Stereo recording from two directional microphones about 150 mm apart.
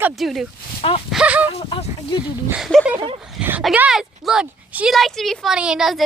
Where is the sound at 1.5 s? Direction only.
35° left (ahead or behind).